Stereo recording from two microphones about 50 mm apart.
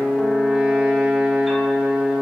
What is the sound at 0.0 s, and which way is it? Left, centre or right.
Music, centre.